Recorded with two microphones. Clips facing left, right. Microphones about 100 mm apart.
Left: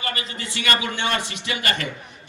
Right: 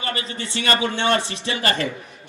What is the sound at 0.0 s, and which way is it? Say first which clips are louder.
A man's voice: right 2 dB; 30° right (ahead or behind).